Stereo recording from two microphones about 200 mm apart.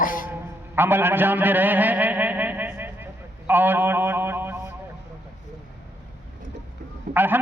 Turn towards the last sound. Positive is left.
turn(degrees=-10)  # may be behind; listen again after turning